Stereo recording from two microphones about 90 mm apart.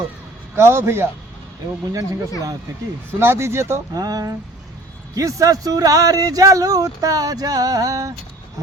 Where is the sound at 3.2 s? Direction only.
30° right (ahead or behind).